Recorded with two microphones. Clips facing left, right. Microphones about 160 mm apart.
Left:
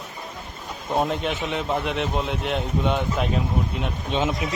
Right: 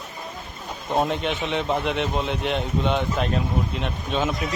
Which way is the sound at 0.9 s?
Centre (ahead or behind).